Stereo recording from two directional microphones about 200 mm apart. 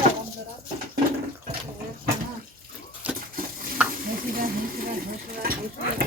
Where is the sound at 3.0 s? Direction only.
5° right (ahead or behind).